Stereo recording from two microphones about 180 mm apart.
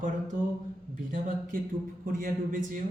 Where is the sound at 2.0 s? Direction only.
50° right (ahead or behind).